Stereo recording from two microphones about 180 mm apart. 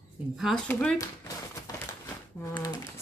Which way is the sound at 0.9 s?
20° left (ahead or behind).